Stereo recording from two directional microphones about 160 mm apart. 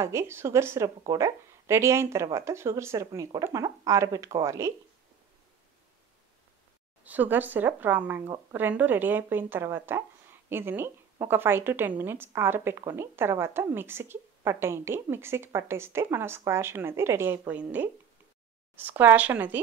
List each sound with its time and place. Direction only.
0.0 s a woman's voice: 15° right (ahead or behind)
7.1 s a woman's voice: 10° right (ahead or behind)